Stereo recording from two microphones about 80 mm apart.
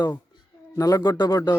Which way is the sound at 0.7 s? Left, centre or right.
Left.